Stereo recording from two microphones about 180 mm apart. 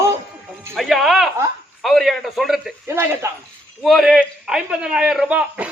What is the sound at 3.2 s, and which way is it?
Speech, 15° right (ahead or behind).